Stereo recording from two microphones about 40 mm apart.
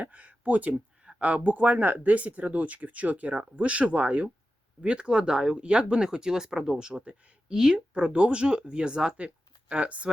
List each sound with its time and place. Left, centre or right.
0.0 s speech: right
7.5 s speech: centre
7.9 s speech: right